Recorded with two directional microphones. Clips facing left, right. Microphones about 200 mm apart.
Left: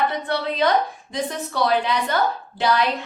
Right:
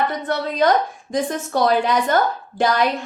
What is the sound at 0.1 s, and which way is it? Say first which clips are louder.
A woman's voice: right 1 dB; 45° right (ahead or behind).